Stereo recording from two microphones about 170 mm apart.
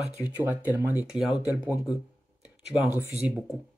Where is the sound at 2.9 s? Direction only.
5° right (ahead or behind).